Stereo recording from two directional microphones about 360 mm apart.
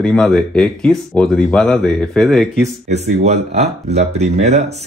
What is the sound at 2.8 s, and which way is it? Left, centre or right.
Speech, centre.